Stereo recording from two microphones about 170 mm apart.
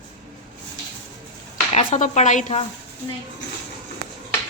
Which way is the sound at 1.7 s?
45° left (ahead or behind).